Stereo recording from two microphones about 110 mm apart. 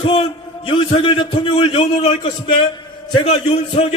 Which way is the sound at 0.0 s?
55° left (ahead or behind).